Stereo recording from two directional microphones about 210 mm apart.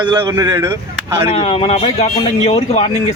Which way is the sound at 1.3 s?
25° left (ahead or behind).